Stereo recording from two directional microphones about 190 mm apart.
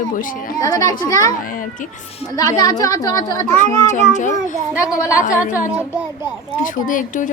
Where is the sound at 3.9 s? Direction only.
40° left (ahead or behind).